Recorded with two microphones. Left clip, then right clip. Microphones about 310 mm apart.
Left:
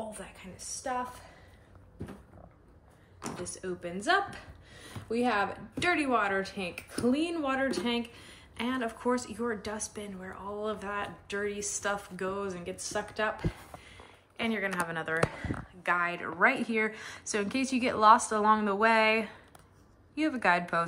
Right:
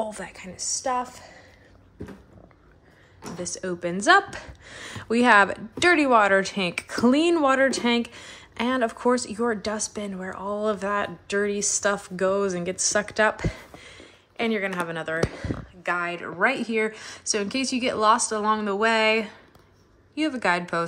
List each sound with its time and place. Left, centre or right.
0.1 s a woman's voice: centre
3.4 s a woman's voice: centre